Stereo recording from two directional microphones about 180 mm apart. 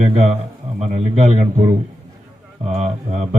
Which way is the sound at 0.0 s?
40° right (ahead or behind).